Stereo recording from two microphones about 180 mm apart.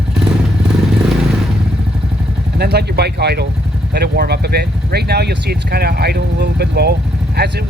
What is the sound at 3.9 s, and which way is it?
Speech, 60° right (ahead or behind).